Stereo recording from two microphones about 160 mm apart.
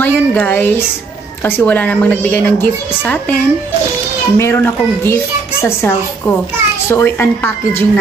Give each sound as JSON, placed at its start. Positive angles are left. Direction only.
{"t": 0.0, "sound": "a woman's voice", "side_deg": 10}
{"t": 4.4, "sound": "a woman's voice", "side_deg": 15}